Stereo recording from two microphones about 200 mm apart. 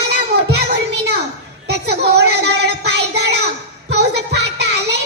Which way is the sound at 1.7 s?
55° right (ahead or behind).